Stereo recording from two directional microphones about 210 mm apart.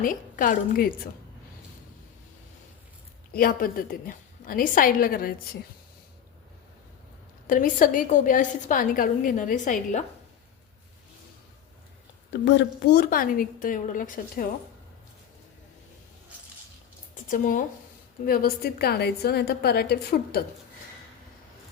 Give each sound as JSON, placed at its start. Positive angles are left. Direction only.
{"t": 0.0, "sound": "a woman's voice", "side_deg": 40}
{"t": 3.3, "sound": "a woman's voice", "side_deg": 45}
{"t": 7.4, "sound": "a woman's voice", "side_deg": 40}
{"t": 12.5, "sound": "a woman's voice", "side_deg": 55}
{"t": 17.2, "sound": "a woman's voice", "side_deg": 40}